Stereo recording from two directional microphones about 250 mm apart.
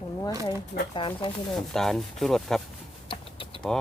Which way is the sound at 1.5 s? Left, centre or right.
Centre.